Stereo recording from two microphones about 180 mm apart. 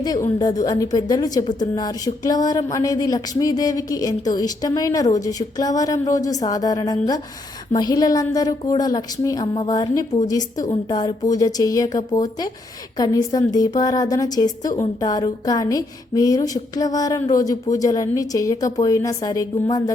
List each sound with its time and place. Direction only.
0.0 s a woman's voice: 20° left (ahead or behind)